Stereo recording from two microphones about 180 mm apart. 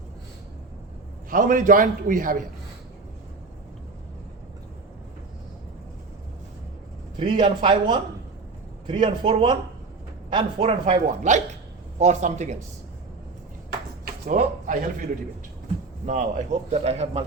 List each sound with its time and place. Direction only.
1.3 s a man's voice: 50° right (ahead or behind)
7.2 s speech: 25° right (ahead or behind)
11.0 s a man's voice: 40° right (ahead or behind)
14.0 s a sound: 50° right (ahead or behind)
16.0 s a man's voice: 45° right (ahead or behind)